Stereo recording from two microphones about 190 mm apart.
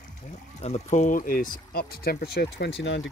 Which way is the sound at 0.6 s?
35° left (ahead or behind).